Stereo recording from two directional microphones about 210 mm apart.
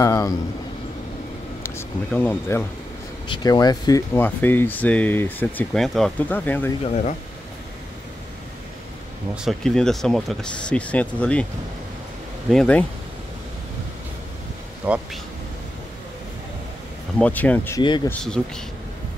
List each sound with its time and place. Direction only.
0.0 s speech: 15° left (ahead or behind)
1.6 s speech: 10° left (ahead or behind)
9.3 s speech: centre (ahead or behind)
12.4 s speech: 5° left (ahead or behind)
14.8 s speech: 10° right (ahead or behind)
17.2 s speech: 5° left (ahead or behind)
17.8 s speech: 20° left (ahead or behind)
18.4 s speech: 5° left (ahead or behind)